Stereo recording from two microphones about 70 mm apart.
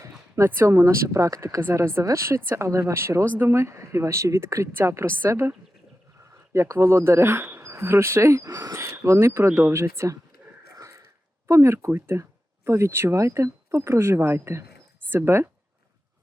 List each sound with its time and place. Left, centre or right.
0.4 s speech: right
1.6 s speech: right
8.4 s speech: right
8.7 s speech: right
11.4 s speech: right